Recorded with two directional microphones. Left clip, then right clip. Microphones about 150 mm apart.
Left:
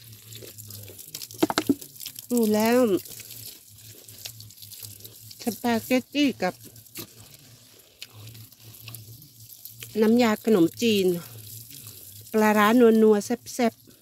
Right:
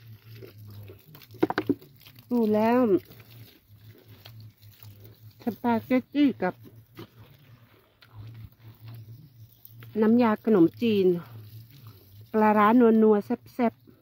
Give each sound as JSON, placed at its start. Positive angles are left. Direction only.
{"t": 2.2, "sound": "speech", "side_deg": 15}
{"t": 5.4, "sound": "speech", "side_deg": 10}
{"t": 9.8, "sound": "speech", "side_deg": 10}